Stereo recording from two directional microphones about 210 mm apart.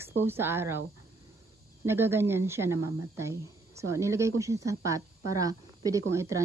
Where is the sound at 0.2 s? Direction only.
10° right (ahead or behind).